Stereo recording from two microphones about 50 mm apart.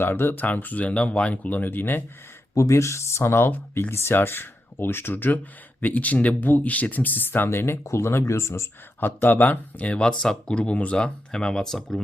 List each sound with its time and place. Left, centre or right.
0.0 s speech: left
0.4 s speech: left
2.6 s speech: left
9.0 s speech: left; by 12.0 s centre